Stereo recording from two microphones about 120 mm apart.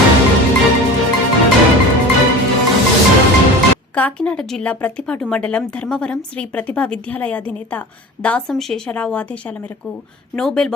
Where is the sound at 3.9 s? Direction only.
10° left (ahead or behind).